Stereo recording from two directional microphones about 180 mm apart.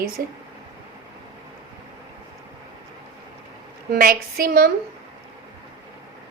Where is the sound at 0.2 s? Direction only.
50° right (ahead or behind).